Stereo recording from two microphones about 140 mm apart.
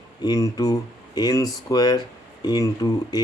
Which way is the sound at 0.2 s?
25° left (ahead or behind).